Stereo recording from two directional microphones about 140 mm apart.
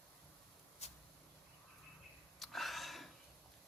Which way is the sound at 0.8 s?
50° left (ahead or behind).